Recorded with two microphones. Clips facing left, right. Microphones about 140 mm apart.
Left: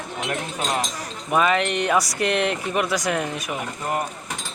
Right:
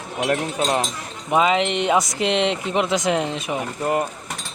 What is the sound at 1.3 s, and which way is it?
Speech, 20° right (ahead or behind).